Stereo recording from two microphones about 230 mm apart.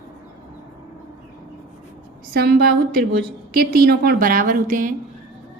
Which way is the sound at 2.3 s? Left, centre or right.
Right.